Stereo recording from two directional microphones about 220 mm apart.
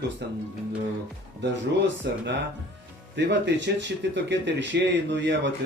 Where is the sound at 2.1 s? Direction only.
50° right (ahead or behind).